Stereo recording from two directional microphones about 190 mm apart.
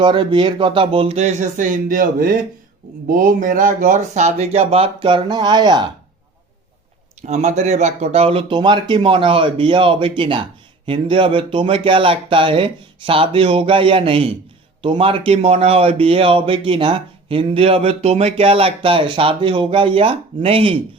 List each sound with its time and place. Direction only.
0.0 s speech: 25° right (ahead or behind)
7.2 s speech: 35° right (ahead or behind)